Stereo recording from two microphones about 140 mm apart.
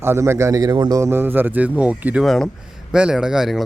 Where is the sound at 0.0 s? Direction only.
20° right (ahead or behind).